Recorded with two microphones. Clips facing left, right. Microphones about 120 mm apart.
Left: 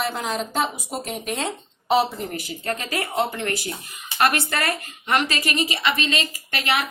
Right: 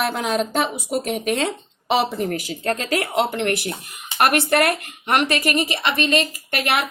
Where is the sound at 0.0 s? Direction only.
70° right (ahead or behind).